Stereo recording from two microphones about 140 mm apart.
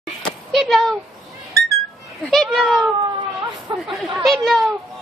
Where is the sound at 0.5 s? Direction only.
Centre (ahead or behind).